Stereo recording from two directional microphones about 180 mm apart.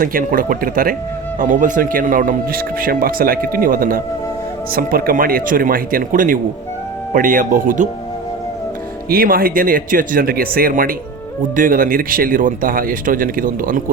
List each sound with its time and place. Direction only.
0.0 s speech: 50° right (ahead or behind)
9.0 s speech: 55° right (ahead or behind)